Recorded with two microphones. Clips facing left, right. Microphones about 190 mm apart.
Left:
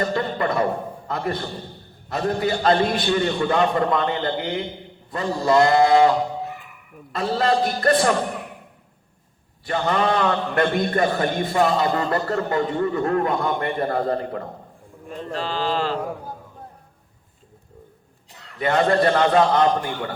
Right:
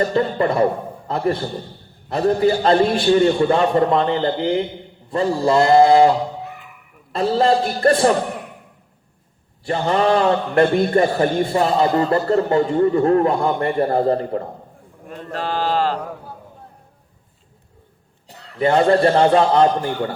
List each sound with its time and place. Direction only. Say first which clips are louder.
0.1 s a man's voice: right 5 dB; 30° right (ahead or behind)
9.6 s a man's voice: right 4 dB; 30° right (ahead or behind)
15.2 s speech: right 3 dB; 50° right (ahead or behind)
18.3 s a man's voice: right 5 dB; 30° right (ahead or behind)